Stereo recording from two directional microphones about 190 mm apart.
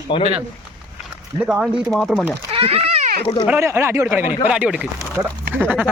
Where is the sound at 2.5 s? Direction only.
30° right (ahead or behind).